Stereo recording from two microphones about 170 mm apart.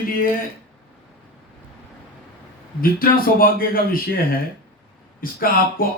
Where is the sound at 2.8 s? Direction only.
55° left (ahead or behind).